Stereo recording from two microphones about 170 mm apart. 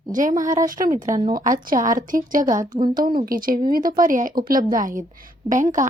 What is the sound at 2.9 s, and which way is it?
A woman's voice, 55° right (ahead or behind).